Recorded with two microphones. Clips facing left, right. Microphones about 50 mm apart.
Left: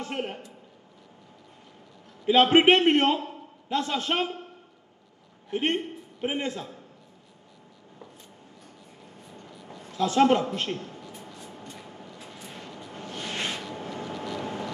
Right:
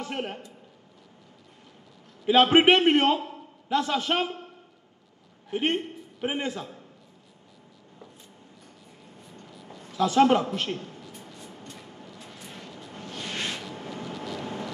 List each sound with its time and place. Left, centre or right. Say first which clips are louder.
0.0 s a woman's voice: even; centre
2.2 s a man's voice: even; centre
5.5 s a man's voice: even; centre
9.2 s a sound: left 1 dB; centre
11.5 s vehicle: left 1 dB; centre
13.1 s a sound: left 1 dB; centre
13.6 s vehicle: left 2 dB; centre